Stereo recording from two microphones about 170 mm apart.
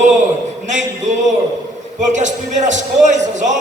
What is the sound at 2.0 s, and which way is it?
A man's voice, 45° right (ahead or behind).